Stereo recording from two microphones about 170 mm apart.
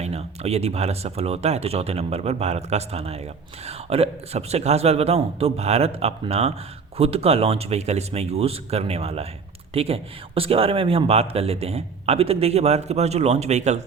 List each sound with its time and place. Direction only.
0.0 s speech: 40° right (ahead or behind)